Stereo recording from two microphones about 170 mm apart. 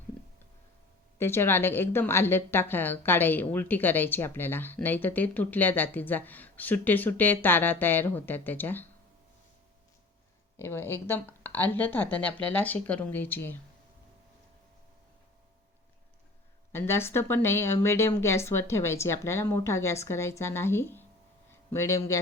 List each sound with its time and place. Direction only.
1.2 s a woman's voice: 15° left (ahead or behind)
10.6 s a woman's voice: 15° left (ahead or behind)
16.7 s a woman's voice: 15° left (ahead or behind)